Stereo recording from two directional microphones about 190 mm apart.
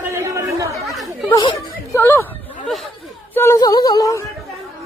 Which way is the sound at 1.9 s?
10° left (ahead or behind).